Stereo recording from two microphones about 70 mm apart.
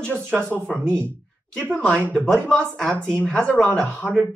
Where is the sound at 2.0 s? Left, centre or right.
Right.